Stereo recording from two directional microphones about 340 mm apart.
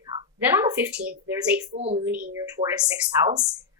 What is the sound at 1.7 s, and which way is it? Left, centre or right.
Speech, centre.